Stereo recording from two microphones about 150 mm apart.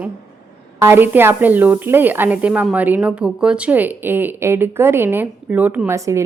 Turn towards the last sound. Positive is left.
turn(degrees=-20)  # may be behind; listen again after turning